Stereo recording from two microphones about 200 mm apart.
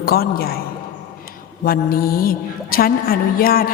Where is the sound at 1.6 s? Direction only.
50° left (ahead or behind).